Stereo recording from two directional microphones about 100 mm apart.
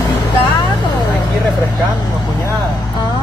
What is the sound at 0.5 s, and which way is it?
Vehicle, 50° left (ahead or behind).